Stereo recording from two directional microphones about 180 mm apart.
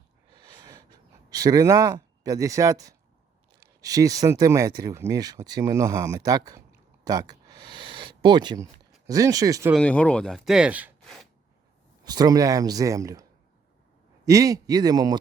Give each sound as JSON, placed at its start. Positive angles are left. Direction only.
{"t": 0.3, "sound": "a sound", "side_deg": -20}
{"t": 1.3, "sound": "speech", "side_deg": -20}
{"t": 9.7, "sound": "speech", "side_deg": 5}
{"t": 12.0, "sound": "speech", "side_deg": -20}
{"t": 14.3, "sound": "speech", "side_deg": -20}